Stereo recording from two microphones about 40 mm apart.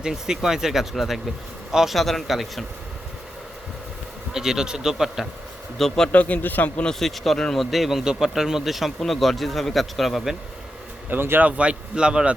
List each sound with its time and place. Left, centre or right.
0.0 s speech: centre
2.0 s speech: centre
4.4 s speech: centre
5.7 s speech: centre
6.1 s a man's voice: left
7.0 s speech: centre
11.3 s a man's voice: right